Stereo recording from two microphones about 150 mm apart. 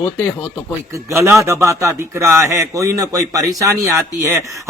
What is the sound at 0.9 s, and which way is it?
A man's voice, 20° right (ahead or behind).